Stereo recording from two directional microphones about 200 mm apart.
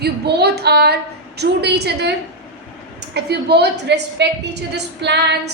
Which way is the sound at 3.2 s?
55° right (ahead or behind).